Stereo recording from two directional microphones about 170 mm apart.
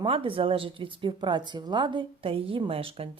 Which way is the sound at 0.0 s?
30° right (ahead or behind).